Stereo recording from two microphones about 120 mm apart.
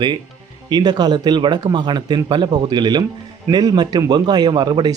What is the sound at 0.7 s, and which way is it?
Speech, 35° right (ahead or behind).